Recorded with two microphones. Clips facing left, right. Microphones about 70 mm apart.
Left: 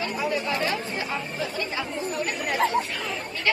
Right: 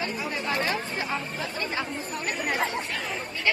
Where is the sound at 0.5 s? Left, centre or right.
Right.